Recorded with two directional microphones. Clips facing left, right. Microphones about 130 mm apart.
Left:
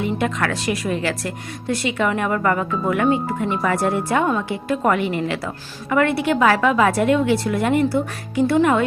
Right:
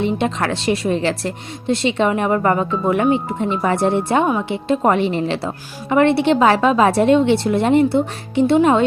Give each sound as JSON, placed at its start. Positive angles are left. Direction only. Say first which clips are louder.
{"t": 0.0, "sound": "speech", "louder": "right 3 dB", "side_deg": -25}